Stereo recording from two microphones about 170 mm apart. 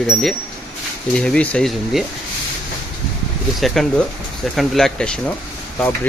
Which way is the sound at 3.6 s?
Centre (ahead or behind).